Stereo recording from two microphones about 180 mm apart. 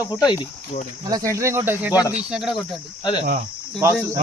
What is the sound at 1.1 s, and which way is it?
Speech, 20° right (ahead or behind).